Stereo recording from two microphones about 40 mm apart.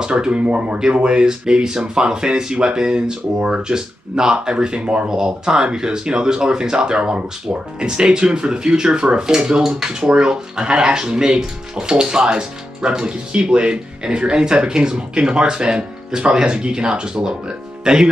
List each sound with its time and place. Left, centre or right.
0.2 s speech: right
5.1 s speech: centre